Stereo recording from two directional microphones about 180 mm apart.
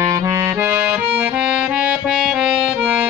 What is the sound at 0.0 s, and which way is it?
Accordion, 15° right (ahead or behind).